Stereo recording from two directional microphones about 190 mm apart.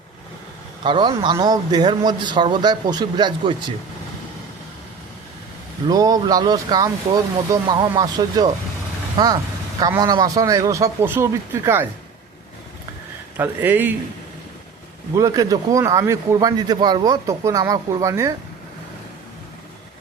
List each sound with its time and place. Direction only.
0.9 s speech: 25° right (ahead or behind)
5.9 s a man's voice: 20° right (ahead or behind)
13.3 s a man's voice: 10° right (ahead or behind)
15.1 s a man's voice: 20° right (ahead or behind)